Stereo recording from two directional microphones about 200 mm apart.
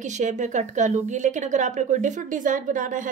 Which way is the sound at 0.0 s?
35° right (ahead or behind).